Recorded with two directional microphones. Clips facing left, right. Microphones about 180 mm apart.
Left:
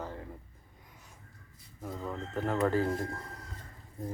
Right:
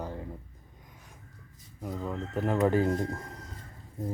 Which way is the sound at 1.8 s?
15° right (ahead or behind).